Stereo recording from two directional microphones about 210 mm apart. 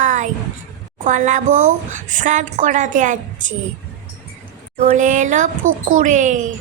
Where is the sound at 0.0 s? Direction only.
35° right (ahead or behind).